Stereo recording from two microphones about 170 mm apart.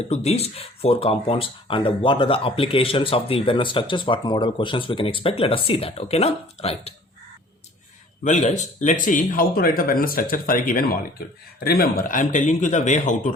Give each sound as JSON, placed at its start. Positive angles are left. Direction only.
{"t": 0.1, "sound": "speech", "side_deg": 40}
{"t": 8.2, "sound": "a man's voice", "side_deg": 45}